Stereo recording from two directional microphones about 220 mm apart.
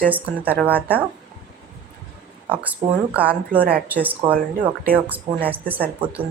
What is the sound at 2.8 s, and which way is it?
Speech, 20° right (ahead or behind).